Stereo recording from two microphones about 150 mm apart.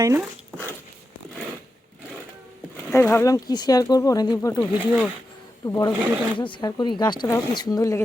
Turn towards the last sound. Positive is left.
turn(degrees=25)  # may be behind; listen again after turning